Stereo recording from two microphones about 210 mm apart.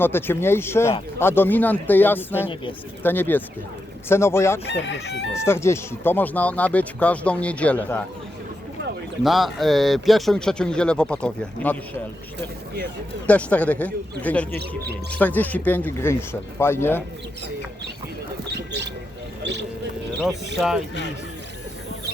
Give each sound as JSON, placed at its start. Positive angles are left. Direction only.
{"t": 0.0, "sound": "speech", "side_deg": 10}
{"t": 4.6, "sound": "chicken", "side_deg": 55}
{"t": 5.3, "sound": "speech", "side_deg": 10}
{"t": 9.2, "sound": "a man's voice", "side_deg": 0}
{"t": 13.2, "sound": "speech", "side_deg": 5}
{"t": 18.5, "sound": "a sound", "side_deg": -55}
{"t": 19.4, "sound": "music", "side_deg": -55}